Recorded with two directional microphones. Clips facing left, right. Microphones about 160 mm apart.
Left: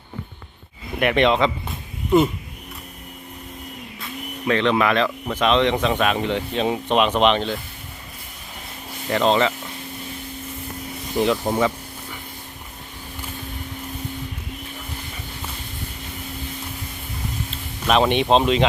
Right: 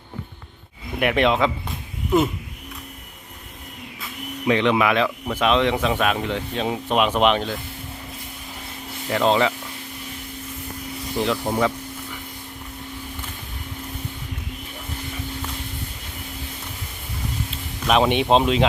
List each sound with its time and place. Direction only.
0.9 s speech: 5° right (ahead or behind)
4.4 s speech: 15° right (ahead or behind)
9.0 s speech: centre (ahead or behind)
11.2 s speech: centre (ahead or behind)
17.8 s speech: 5° right (ahead or behind)